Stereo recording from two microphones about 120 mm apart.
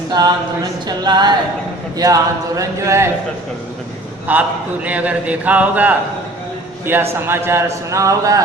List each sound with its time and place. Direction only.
0.1 s a man's voice: 35° right (ahead or behind)
4.3 s a man's voice: 15° right (ahead or behind)